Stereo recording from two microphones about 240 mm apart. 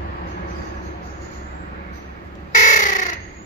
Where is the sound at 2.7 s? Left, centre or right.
Left.